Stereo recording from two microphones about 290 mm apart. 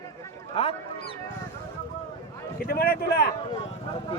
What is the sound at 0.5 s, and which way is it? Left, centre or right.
Speech, centre.